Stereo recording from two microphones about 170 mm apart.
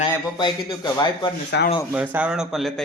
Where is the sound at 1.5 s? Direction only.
90° left.